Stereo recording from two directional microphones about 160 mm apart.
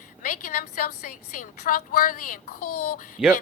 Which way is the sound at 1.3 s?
55° left (ahead or behind).